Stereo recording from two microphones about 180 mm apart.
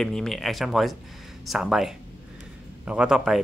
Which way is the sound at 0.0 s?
Centre (ahead or behind).